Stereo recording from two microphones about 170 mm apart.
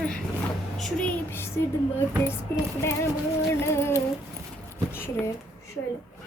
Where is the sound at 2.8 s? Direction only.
15° left (ahead or behind).